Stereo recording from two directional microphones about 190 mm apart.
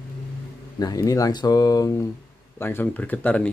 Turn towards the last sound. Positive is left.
turn(degrees=10)  # may be behind; listen again after turning